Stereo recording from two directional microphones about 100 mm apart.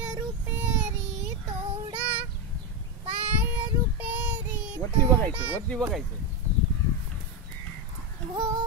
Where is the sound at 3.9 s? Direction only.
15° right (ahead or behind).